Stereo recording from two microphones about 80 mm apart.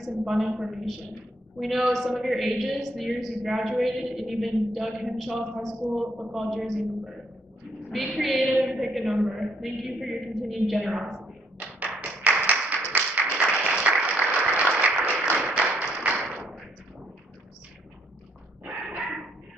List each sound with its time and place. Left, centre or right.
0.0 s a woman's voice: centre
11.8 s tap: centre
13.1 s applause: centre
15.4 s a sound: centre
18.7 s dog: centre